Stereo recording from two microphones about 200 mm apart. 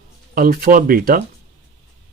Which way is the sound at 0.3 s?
45° right (ahead or behind).